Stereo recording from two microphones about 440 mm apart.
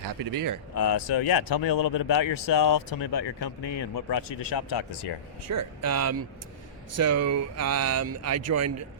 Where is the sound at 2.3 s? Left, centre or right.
Left.